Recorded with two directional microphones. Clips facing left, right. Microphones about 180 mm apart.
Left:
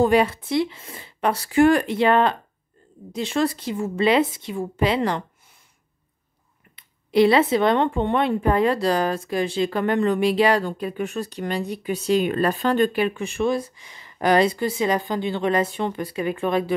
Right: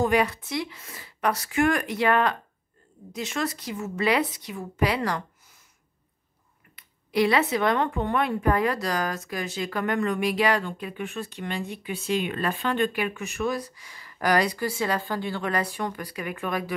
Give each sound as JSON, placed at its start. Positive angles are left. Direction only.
{"t": 0.0, "sound": "speech", "side_deg": 30}
{"t": 6.7, "sound": "speech", "side_deg": 25}